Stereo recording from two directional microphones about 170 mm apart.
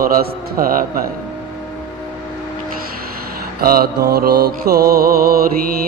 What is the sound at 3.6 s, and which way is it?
Mantra, 65° right (ahead or behind).